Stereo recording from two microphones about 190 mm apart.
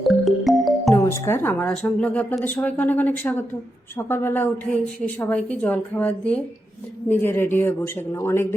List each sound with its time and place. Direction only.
0.0 s music: centre (ahead or behind)
0.9 s speech: 15° left (ahead or behind)